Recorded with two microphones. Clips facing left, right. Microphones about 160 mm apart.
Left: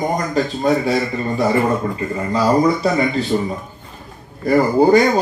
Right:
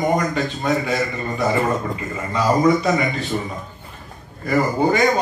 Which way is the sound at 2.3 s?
35° left (ahead or behind).